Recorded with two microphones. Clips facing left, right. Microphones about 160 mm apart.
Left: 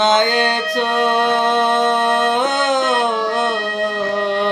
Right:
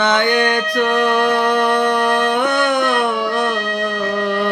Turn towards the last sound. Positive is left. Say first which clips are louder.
# even
turn(degrees=20)  # may be behind; listen again after turning